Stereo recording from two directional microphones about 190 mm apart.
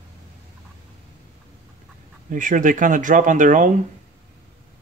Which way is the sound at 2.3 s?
45° right (ahead or behind).